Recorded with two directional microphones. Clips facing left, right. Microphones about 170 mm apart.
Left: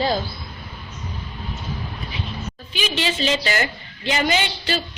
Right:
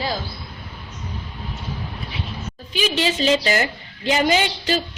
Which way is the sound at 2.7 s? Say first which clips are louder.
Right 3 dB; 40° right (ahead or behind).